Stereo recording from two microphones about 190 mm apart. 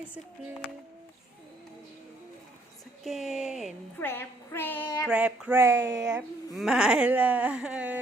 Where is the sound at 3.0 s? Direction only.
Centre (ahead or behind).